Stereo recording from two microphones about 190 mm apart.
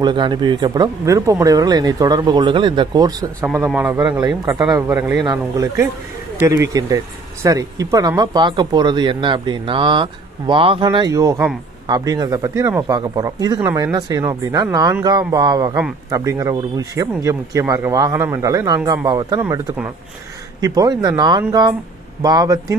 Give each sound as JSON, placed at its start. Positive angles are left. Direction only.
{"t": 0.0, "sound": "speech", "side_deg": -25}
{"t": 4.0, "sound": "speech", "side_deg": -20}